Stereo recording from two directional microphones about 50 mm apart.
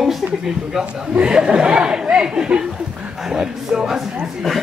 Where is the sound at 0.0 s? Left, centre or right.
Centre.